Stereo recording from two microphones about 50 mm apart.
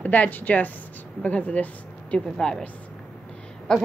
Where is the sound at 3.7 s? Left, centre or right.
Centre.